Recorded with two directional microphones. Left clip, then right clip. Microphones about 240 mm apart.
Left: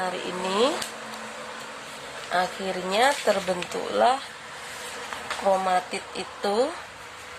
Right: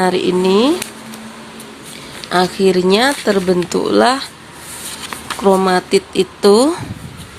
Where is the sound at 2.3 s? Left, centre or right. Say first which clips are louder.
Right 12 dB; right.